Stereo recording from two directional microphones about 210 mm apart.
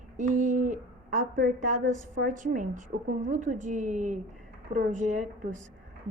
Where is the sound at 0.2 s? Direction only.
35° right (ahead or behind).